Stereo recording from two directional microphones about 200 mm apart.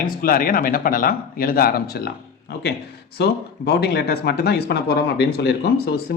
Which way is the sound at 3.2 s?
55° left (ahead or behind).